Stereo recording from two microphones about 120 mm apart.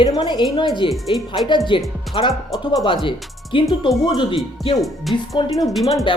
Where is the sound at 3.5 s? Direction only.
45° left (ahead or behind).